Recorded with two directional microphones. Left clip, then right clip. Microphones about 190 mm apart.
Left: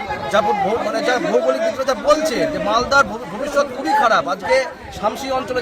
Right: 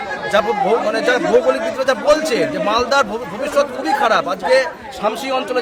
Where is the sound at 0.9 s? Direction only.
20° right (ahead or behind).